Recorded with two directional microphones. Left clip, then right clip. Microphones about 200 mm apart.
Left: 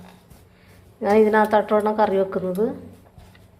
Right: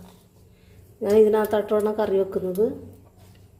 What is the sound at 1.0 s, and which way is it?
A woman's voice, 20° right (ahead or behind).